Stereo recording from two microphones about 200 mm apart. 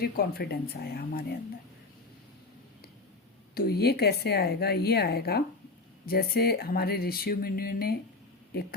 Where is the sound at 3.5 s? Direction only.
50° left (ahead or behind).